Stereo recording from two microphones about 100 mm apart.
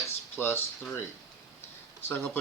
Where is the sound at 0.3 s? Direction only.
25° left (ahead or behind).